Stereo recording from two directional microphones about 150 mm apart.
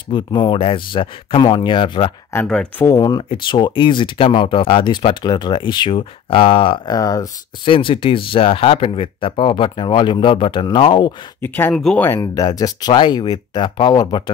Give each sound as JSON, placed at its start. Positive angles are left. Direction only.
{"t": 0.1, "sound": "speech", "side_deg": 30}
{"t": 2.3, "sound": "speech", "side_deg": 5}
{"t": 2.9, "sound": "speech", "side_deg": 25}
{"t": 7.0, "sound": "speech", "side_deg": 25}
{"t": 7.6, "sound": "speech", "side_deg": 35}
{"t": 11.4, "sound": "speech", "side_deg": 15}
{"t": 12.1, "sound": "speech", "side_deg": 25}